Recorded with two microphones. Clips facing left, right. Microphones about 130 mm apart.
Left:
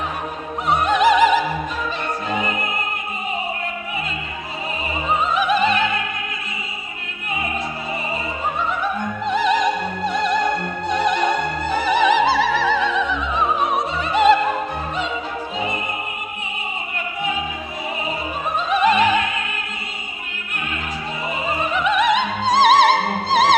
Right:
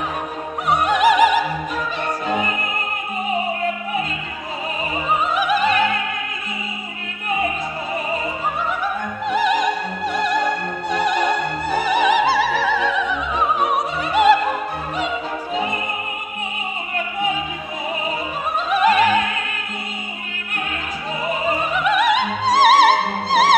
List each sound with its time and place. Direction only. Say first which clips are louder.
0.7 s opera: even; 10° right (ahead or behind)
5.3 s music: left 1 dB; 10° right (ahead or behind)
8.8 s music: left 1 dB; 10° right (ahead or behind)
11.7 s opera: even; 10° right (ahead or behind)
18.7 s music: right 1 dB; 5° right (ahead or behind)
21.7 s music: left 1 dB; 5° right (ahead or behind)